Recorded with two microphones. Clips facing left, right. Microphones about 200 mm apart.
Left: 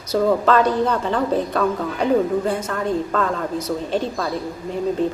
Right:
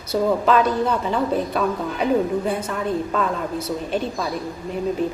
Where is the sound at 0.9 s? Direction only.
15° right (ahead or behind).